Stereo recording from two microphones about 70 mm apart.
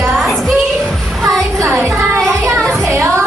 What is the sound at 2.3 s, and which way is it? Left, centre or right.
Child singing, right.